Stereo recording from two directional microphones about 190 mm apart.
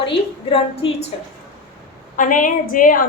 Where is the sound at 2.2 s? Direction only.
45° left (ahead or behind).